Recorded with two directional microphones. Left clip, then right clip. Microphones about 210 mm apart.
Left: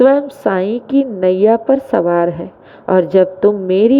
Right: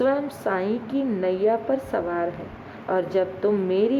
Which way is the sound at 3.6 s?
60° left (ahead or behind).